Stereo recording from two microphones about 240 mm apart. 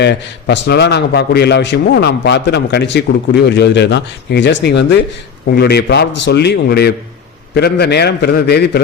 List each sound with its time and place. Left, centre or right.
0.0 s a man's voice: left